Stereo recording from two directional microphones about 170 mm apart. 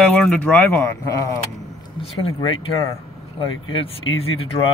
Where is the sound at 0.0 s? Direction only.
5° left (ahead or behind).